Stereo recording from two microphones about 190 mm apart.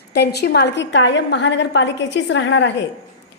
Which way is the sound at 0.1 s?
60° left (ahead or behind).